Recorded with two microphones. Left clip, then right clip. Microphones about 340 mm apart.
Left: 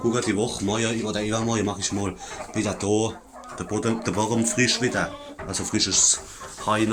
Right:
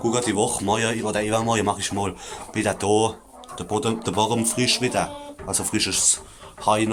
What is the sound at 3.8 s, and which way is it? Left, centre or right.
Speech, centre.